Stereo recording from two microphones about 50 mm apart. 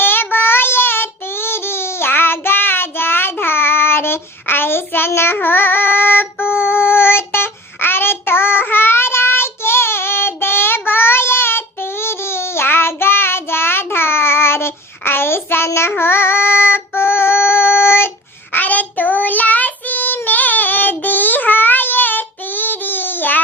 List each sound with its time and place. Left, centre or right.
0.0 s child singing: left
18.5 s child singing: left